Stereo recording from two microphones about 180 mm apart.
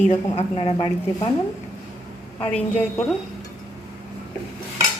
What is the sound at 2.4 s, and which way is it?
Speech, 5° left (ahead or behind).